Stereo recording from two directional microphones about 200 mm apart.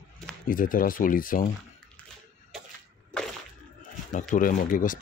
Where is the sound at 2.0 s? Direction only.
5° left (ahead or behind).